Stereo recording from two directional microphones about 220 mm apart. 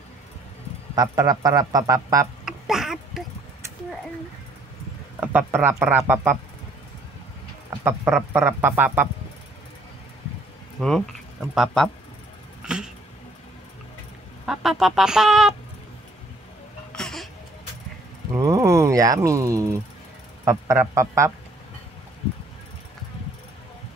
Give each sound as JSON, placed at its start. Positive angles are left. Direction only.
{"t": 0.9, "sound": "speech", "side_deg": -15}
{"t": 2.4, "sound": "a sound", "side_deg": 0}
{"t": 5.2, "sound": "speech", "side_deg": -10}
{"t": 8.3, "sound": "speech", "side_deg": -10}
{"t": 10.8, "sound": "speech", "side_deg": 0}
{"t": 12.6, "sound": "a sound", "side_deg": -5}
{"t": 14.4, "sound": "speech", "side_deg": 0}
{"t": 16.9, "sound": "a sound", "side_deg": 0}
{"t": 18.3, "sound": "speech", "side_deg": -15}